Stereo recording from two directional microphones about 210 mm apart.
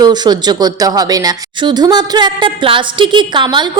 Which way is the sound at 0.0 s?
20° right (ahead or behind).